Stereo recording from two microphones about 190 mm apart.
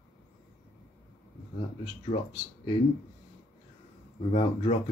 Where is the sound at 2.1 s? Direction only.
45° left (ahead or behind).